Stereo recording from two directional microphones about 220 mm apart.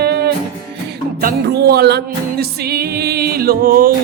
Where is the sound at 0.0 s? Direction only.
45° right (ahead or behind).